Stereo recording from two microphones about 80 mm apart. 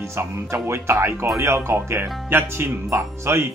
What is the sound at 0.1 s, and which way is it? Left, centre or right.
Speech, right.